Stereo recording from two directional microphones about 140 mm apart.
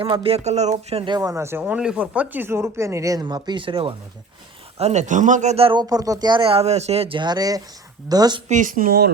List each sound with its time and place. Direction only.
0.0 s speech: 40° right (ahead or behind)
1.0 s speech: 25° right (ahead or behind)
4.8 s speech: 55° right (ahead or behind)
5.8 s speech: 25° right (ahead or behind)
8.4 s speech: 65° right (ahead or behind); by 9.0 s 85° right